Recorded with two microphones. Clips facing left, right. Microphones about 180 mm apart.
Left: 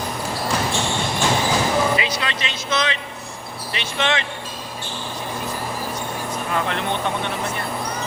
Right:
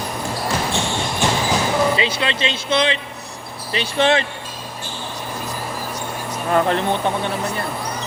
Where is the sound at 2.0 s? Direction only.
30° right (ahead or behind).